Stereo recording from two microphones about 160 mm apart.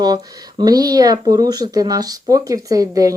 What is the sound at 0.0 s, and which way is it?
Speech, 25° right (ahead or behind).